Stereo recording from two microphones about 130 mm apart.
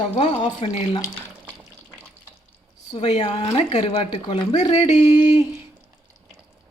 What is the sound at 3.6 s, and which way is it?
Speech, 50° left (ahead or behind).